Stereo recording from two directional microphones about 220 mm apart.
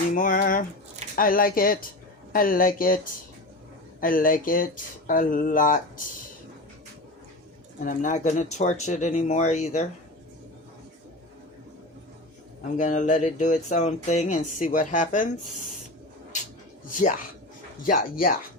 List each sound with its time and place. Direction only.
0.1 s speech: 35° left (ahead or behind)
7.8 s speech: 35° left (ahead or behind)
12.7 s speech: 35° left (ahead or behind)
16.9 s speech: 35° left (ahead or behind)